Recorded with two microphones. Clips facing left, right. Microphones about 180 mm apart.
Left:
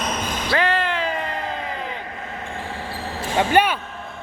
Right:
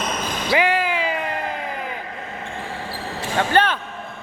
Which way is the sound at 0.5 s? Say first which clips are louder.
Right 2 dB; 10° right (ahead or behind).